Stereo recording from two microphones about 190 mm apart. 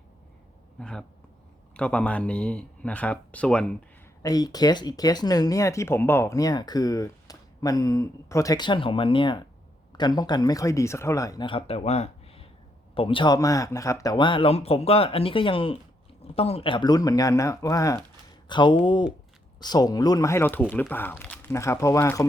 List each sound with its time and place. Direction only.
0.8 s speech: 5° left (ahead or behind)
4.2 s speech: 20° left (ahead or behind)